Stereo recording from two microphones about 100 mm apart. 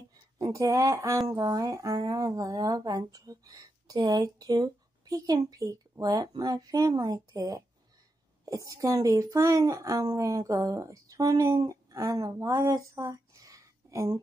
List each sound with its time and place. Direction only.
0.4 s speech: 35° right (ahead or behind)